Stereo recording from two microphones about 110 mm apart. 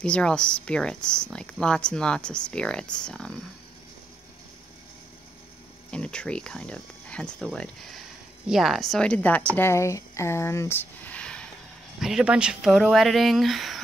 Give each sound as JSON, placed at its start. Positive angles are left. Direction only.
{"t": 0.0, "sound": "speech", "side_deg": 10}
{"t": 5.9, "sound": "speech", "side_deg": 10}
{"t": 9.6, "sound": "speech", "side_deg": 25}
{"t": 12.0, "sound": "speech", "side_deg": -5}